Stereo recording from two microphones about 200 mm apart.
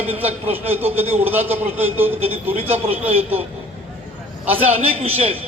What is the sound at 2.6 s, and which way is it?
Speech, 30° right (ahead or behind).